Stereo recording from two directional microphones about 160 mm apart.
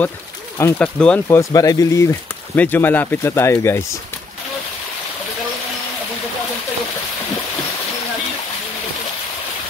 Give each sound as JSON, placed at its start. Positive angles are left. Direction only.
{"t": 0.6, "sound": "speech", "side_deg": 10}
{"t": 1.4, "sound": "speech", "side_deg": 20}